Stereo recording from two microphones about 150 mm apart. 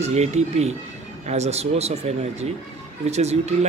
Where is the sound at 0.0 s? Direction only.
45° right (ahead or behind).